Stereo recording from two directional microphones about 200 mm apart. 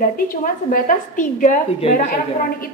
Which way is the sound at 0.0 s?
45° left (ahead or behind).